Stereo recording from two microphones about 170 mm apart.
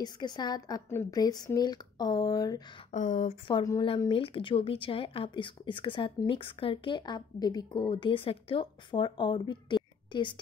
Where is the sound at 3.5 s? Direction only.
25° left (ahead or behind).